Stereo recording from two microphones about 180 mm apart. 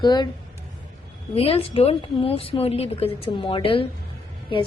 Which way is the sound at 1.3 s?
30° left (ahead or behind).